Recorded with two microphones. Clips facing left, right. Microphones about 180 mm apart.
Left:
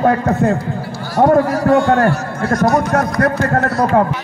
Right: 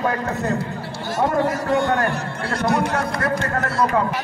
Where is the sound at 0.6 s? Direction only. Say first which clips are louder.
Left 4 dB; 25° right (ahead or behind).